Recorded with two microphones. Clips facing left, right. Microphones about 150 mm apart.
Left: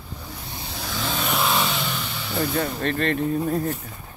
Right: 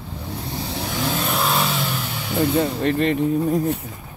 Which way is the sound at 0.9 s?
10° right (ahead or behind).